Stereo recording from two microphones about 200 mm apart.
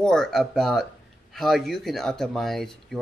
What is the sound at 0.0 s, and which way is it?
Speech, 5° left (ahead or behind).